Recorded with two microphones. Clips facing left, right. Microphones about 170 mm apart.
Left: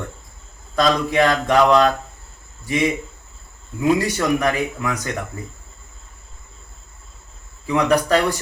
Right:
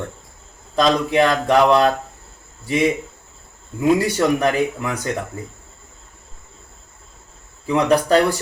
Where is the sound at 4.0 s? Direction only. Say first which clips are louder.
Right 2 dB; 30° right (ahead or behind).